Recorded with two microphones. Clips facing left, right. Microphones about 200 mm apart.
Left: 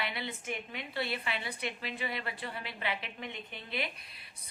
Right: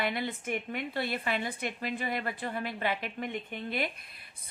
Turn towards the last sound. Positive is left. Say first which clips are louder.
# right 4 dB
turn(degrees=-50)  # may be behind; listen again after turning